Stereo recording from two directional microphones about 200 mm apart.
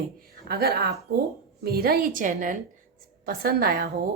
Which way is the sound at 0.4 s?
50° right (ahead or behind).